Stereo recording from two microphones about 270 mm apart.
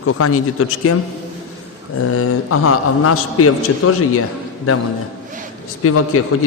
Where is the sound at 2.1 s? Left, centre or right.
Left.